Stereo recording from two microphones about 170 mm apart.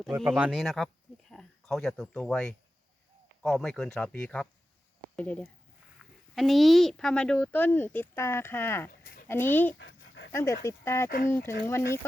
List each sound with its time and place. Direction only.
0.3 s speech: 5° right (ahead or behind)
6.0 s a sound: centre (ahead or behind)
6.3 s speech: centre (ahead or behind)
9.7 s dog: 90° left
10.3 s speech: 15° left (ahead or behind)